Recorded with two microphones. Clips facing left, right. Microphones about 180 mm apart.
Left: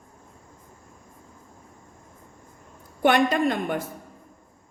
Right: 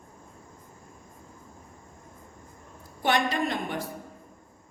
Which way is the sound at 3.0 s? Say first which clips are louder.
Left 6 dB; 55° left (ahead or behind).